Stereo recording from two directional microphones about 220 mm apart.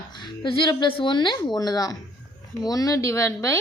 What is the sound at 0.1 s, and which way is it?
A woman's voice, 20° left (ahead or behind).